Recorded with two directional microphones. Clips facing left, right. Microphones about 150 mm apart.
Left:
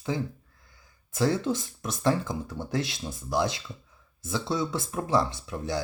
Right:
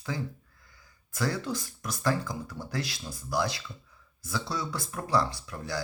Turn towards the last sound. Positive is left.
turn(degrees=20)  # may be behind; listen again after turning